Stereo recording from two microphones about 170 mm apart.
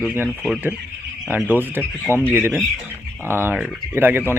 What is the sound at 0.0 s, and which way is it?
Speech, 10° right (ahead or behind).